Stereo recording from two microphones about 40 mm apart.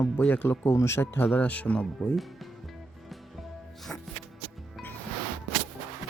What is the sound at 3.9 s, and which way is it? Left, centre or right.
Music, left.